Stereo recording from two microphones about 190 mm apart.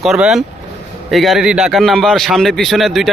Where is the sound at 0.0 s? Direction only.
Centre (ahead or behind).